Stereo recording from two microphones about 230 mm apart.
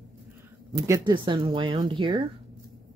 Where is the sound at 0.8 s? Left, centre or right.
Centre.